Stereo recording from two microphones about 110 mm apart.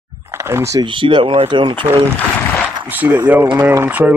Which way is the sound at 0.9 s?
50° right (ahead or behind).